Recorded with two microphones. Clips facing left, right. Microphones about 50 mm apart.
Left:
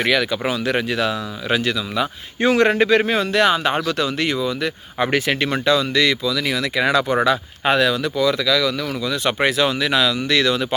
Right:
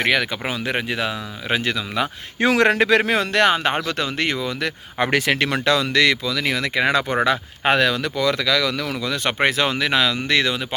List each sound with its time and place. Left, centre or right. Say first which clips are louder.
0.0 s speech: left 2 dB; right
2.4 s speech: left 1 dB; right
6.3 s speech: left 1 dB; right
10.5 s speech: left 5 dB; centre